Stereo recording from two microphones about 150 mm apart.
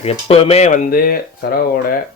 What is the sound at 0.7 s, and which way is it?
Speech, 80° left.